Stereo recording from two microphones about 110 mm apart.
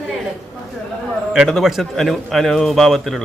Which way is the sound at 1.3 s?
Centre (ahead or behind).